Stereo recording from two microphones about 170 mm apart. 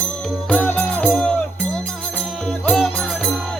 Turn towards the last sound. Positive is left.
turn(degrees=5)  # may be behind; listen again after turning